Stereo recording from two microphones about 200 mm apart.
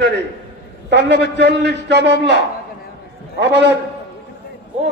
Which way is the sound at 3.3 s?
60° right (ahead or behind).